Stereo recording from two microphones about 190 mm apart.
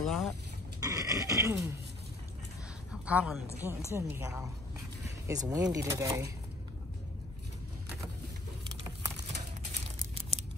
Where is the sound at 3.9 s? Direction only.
15° right (ahead or behind).